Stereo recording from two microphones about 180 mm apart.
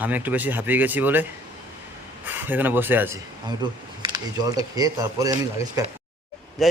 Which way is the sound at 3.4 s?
25° right (ahead or behind).